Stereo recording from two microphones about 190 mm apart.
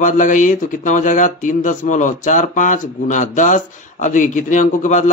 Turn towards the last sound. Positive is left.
turn(degrees=40)  # may be behind; listen again after turning